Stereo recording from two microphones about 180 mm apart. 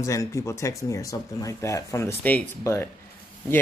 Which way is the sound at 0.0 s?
15° left (ahead or behind).